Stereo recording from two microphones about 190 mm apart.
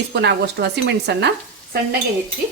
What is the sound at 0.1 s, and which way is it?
A woman's voice, 65° right (ahead or behind).